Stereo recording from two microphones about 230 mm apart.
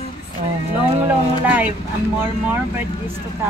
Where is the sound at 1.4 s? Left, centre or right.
Centre.